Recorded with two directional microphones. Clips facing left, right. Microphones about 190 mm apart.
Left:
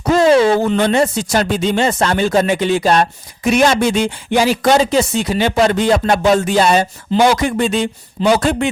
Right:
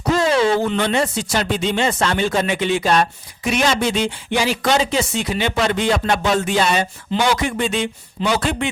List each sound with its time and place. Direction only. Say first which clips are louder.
0.4 s speech: left 4 dB; 45° left (ahead or behind)